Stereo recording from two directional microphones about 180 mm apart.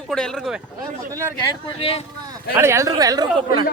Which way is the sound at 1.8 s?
30° left (ahead or behind).